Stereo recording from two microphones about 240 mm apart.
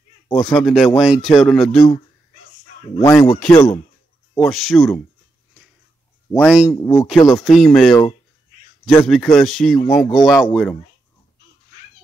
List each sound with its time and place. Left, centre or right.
0.3 s speech: centre
2.9 s speech: left
3.3 s speech: centre
6.3 s speech: centre
7.4 s speech: centre
9.8 s speech: centre
10.4 s speech: centre